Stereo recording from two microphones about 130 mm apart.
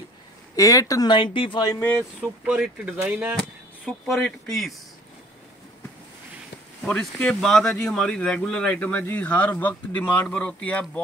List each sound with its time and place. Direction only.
0.6 s speech: 25° left (ahead or behind)
1.7 s speech: 15° left (ahead or behind)
2.4 s speech: 5° right (ahead or behind)
3.3 s speech: 5° left (ahead or behind)
6.8 s speech: 5° left (ahead or behind)